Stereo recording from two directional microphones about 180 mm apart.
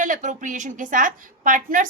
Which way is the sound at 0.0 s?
45° right (ahead or behind).